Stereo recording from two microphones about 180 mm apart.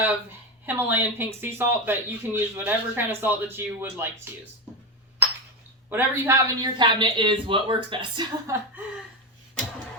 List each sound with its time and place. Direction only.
0.6 s speech: 10° right (ahead or behind)
5.9 s speech: 15° right (ahead or behind)